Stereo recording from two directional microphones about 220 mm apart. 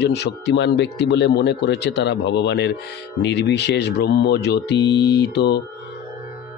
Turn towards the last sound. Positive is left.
turn(degrees=50)  # may be behind; listen again after turning